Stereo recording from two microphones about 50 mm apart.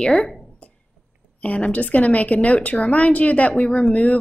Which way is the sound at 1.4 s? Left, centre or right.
Left.